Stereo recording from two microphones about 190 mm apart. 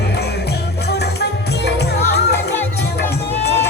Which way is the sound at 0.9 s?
60° left (ahead or behind).